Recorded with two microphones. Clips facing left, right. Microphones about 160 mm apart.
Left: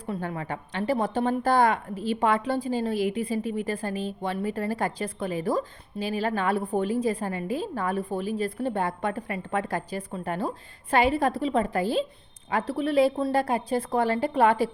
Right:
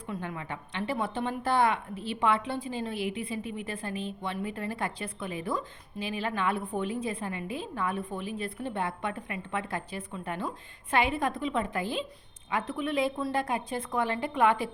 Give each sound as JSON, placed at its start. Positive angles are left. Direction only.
{"t": 0.1, "sound": "a woman's voice", "side_deg": 40}